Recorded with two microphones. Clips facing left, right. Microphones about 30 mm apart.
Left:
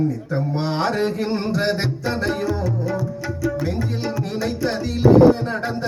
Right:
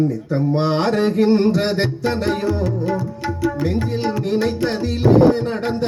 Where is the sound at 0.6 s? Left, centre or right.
Right.